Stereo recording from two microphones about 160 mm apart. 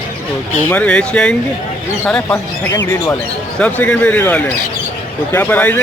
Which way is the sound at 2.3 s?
20° left (ahead or behind).